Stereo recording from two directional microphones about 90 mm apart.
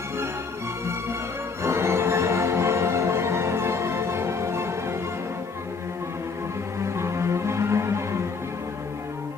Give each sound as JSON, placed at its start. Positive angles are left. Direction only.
{"t": 1.6, "sound": "music", "side_deg": -30}
{"t": 6.8, "sound": "music", "side_deg": -30}